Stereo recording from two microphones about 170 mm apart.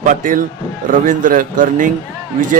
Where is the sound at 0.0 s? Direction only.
50° right (ahead or behind).